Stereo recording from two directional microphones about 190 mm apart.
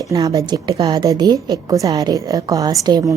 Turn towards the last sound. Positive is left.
turn(degrees=-20)  # may be behind; listen again after turning